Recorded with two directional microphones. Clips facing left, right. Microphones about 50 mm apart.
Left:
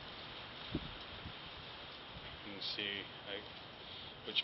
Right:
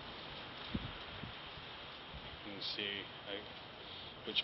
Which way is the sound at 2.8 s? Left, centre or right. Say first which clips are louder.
Even; centre.